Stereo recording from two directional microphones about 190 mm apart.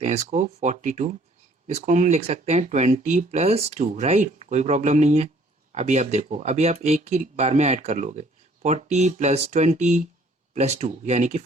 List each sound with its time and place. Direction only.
0.0 s speech: 35° right (ahead or behind)